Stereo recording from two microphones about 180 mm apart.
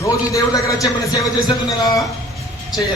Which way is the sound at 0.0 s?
20° left (ahead or behind).